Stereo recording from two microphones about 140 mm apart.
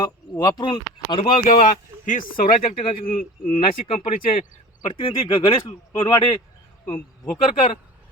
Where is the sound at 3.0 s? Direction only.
80° left.